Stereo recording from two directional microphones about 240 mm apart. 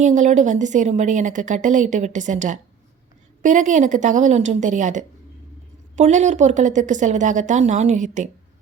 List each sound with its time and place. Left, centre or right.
0.0 s a woman's voice: right